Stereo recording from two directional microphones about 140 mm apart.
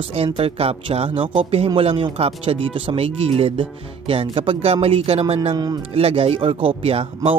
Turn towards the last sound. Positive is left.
turn(degrees=-40)  # may be behind; listen again after turning